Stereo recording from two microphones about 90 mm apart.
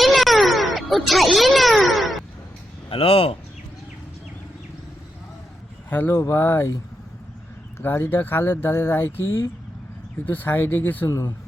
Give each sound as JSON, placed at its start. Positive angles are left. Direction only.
{"t": 0.0, "sound": "a sound", "side_deg": 0}
{"t": 2.9, "sound": "speech", "side_deg": 90}
{"t": 5.9, "sound": "speech", "side_deg": 20}
{"t": 6.1, "sound": "speech", "side_deg": 35}
{"t": 7.8, "sound": "speech", "side_deg": 25}
{"t": 11.1, "sound": "speech", "side_deg": 35}